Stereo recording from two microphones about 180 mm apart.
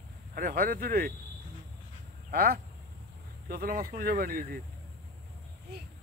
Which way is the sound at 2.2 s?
55° right (ahead or behind).